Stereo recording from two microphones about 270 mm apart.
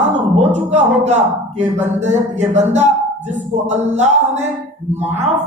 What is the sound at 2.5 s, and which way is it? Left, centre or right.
Speech, right.